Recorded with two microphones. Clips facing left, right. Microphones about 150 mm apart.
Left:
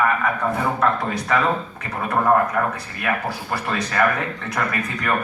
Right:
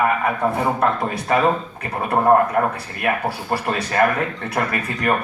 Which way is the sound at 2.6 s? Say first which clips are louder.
Right 3 dB; 35° right (ahead or behind).